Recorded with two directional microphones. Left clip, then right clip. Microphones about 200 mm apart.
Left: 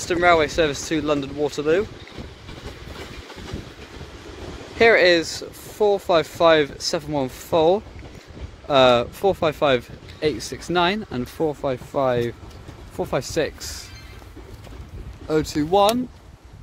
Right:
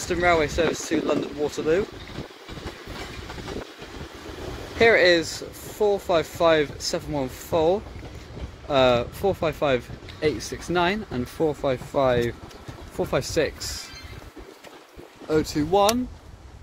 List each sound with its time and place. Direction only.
0.0 s speech: 20° left (ahead or behind)
4.7 s speech: 15° left (ahead or behind)
15.5 s speech: 30° left (ahead or behind)